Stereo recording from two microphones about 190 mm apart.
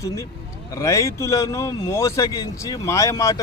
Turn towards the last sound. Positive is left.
turn(degrees=15)  # may be behind; listen again after turning